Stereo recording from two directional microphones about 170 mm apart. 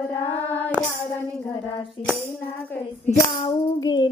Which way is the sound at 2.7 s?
15° left (ahead or behind).